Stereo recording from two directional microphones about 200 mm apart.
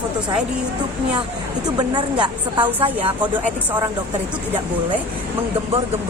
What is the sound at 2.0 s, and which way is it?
Speech, 25° right (ahead or behind).